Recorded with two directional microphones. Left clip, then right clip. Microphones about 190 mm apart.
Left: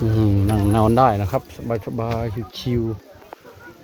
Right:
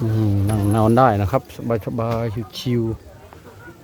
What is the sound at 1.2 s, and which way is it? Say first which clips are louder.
Speech: right 2 dB; 40° right (ahead or behind).